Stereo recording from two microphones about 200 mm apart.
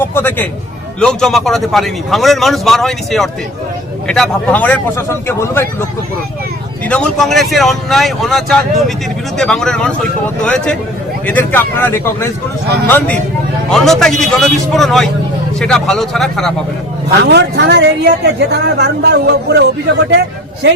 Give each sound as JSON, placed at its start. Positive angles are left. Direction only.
{"t": 0.0, "sound": "a man's voice", "side_deg": 10}
{"t": 6.8, "sound": "a man's voice", "side_deg": 5}
{"t": 17.2, "sound": "speech", "side_deg": -60}